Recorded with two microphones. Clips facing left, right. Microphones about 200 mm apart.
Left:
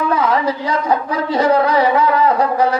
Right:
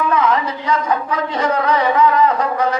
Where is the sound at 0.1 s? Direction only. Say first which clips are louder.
Left 1 dB; 35° left (ahead or behind).